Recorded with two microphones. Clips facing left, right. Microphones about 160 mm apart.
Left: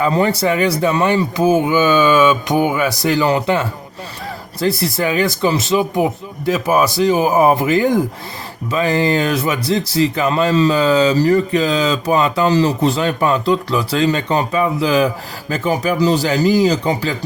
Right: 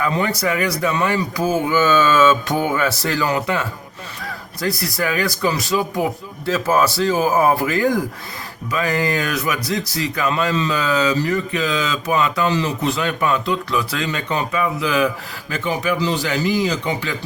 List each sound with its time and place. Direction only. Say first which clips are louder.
0.0 s speech: left 5 dB; 30° left (ahead or behind)
3.2 s speech: left 5 dB; 30° left (ahead or behind)